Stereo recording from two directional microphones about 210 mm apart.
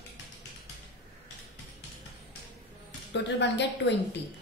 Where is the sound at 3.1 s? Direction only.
55° left (ahead or behind).